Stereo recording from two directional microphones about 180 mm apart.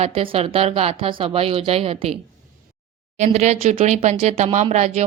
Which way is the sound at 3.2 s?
40° right (ahead or behind).